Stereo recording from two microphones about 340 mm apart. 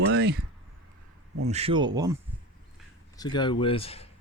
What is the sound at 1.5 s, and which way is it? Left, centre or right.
Speech, centre.